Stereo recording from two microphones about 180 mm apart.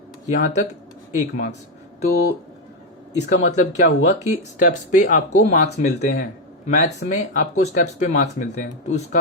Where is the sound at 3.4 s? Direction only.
40° left (ahead or behind).